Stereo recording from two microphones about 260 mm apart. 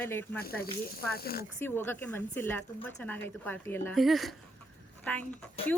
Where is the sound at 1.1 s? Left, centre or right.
Left.